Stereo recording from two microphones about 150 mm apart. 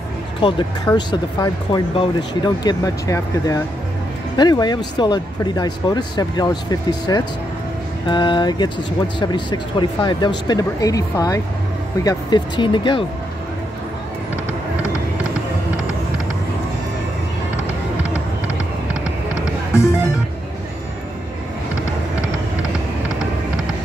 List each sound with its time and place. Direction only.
0.4 s speech: 35° left (ahead or behind)
19.7 s music: 20° left (ahead or behind)